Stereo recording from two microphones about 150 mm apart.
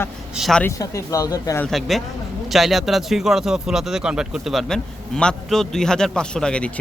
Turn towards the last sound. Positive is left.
turn(degrees=5)  # may be behind; listen again after turning